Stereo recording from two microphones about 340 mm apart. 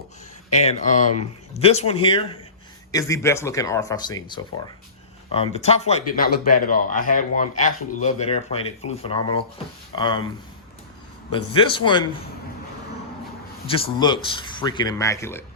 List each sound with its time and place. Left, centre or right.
0.6 s speech: centre
11.3 s speech: centre
13.7 s speech: centre